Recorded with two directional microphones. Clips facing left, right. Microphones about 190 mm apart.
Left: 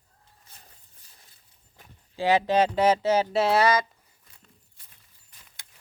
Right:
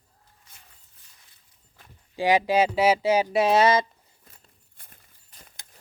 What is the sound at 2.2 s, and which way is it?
Speech, 15° right (ahead or behind).